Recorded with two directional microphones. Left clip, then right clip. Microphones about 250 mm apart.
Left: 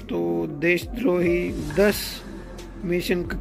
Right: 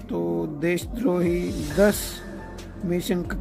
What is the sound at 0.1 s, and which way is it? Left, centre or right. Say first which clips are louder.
Speech: left 1 dB; centre.